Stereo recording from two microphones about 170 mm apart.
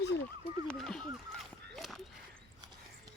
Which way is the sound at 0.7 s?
5° left (ahead or behind).